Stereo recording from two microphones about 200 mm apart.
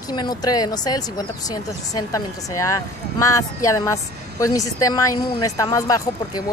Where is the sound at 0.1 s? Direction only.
20° left (ahead or behind).